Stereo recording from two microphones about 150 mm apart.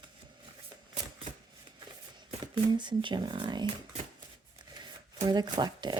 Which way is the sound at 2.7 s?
30° right (ahead or behind).